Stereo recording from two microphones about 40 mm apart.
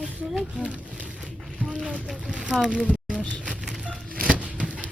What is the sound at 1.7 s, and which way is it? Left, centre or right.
Boat, right.